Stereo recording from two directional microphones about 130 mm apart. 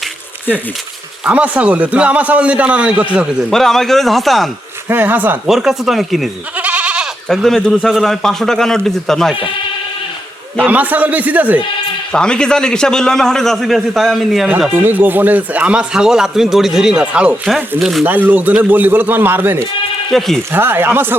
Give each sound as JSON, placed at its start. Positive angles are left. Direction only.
{"t": 1.2, "sound": "speech", "side_deg": -10}
{"t": 3.5, "sound": "a man's voice", "side_deg": 5}
{"t": 4.9, "sound": "speech", "side_deg": -15}
{"t": 5.5, "sound": "a man's voice", "side_deg": -5}
{"t": 6.6, "sound": "goat", "side_deg": -10}
{"t": 7.3, "sound": "a man's voice", "side_deg": 5}
{"t": 10.6, "sound": "speech", "side_deg": -10}
{"t": 12.1, "sound": "a man's voice", "side_deg": 5}
{"t": 14.7, "sound": "a man's voice", "side_deg": -15}
{"t": 18.0, "sound": "speech", "side_deg": -15}
{"t": 20.1, "sound": "a man's voice", "side_deg": 0}
{"t": 20.5, "sound": "speech", "side_deg": -15}